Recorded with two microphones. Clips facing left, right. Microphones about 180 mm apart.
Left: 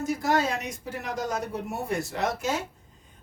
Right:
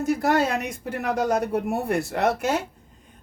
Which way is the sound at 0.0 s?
60° right (ahead or behind).